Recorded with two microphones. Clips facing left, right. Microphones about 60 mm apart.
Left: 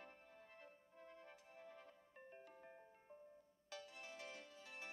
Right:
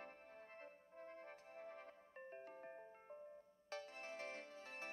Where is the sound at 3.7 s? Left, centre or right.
Right.